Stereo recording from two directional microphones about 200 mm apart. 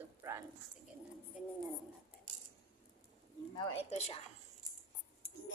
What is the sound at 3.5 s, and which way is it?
Speech, 30° left (ahead or behind).